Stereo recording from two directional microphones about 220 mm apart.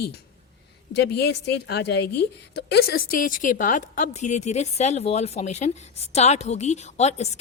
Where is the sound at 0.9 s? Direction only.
50° left (ahead or behind).